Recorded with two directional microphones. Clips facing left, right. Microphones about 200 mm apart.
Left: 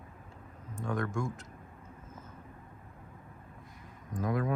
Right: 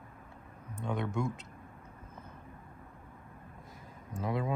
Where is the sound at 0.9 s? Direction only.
20° right (ahead or behind).